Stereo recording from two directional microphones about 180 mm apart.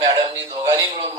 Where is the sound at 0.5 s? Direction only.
25° right (ahead or behind).